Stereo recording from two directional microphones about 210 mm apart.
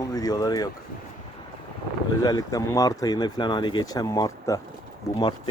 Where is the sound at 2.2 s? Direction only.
15° left (ahead or behind).